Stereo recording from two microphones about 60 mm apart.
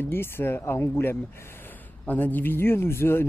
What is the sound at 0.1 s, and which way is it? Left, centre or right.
Speech, left.